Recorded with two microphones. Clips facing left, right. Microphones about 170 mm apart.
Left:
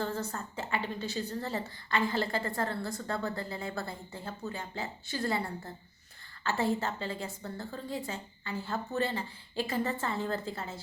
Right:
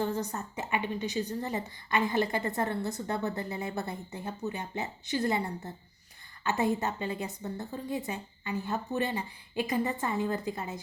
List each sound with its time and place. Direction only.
0.0 s a woman's voice: 15° right (ahead or behind)